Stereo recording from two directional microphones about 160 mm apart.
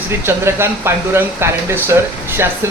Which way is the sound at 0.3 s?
15° right (ahead or behind).